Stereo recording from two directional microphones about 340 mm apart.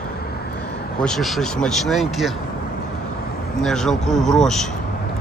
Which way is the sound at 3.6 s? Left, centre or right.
Centre.